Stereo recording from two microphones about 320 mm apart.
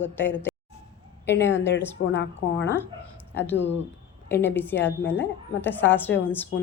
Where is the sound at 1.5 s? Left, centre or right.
Left.